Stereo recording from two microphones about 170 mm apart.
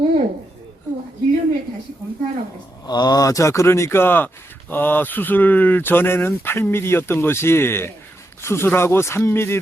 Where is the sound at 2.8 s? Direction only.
25° left (ahead or behind).